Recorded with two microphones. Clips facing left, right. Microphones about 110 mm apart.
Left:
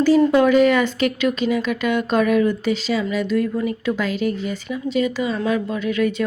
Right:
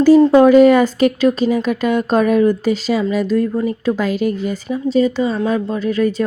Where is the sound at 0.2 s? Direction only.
35° right (ahead or behind).